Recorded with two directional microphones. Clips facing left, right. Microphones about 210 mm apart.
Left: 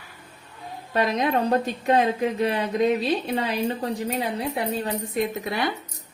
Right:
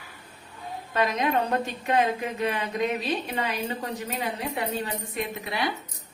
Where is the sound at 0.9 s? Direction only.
35° left (ahead or behind).